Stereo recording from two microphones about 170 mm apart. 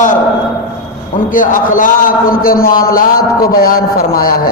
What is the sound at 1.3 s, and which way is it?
A man's voice, 50° left (ahead or behind).